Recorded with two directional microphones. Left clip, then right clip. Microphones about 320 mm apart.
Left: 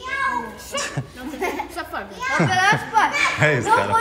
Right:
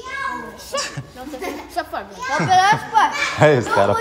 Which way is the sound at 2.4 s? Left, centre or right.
Right.